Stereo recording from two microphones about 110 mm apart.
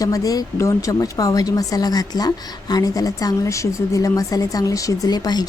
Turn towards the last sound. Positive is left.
turn(degrees=40)  # may be behind; listen again after turning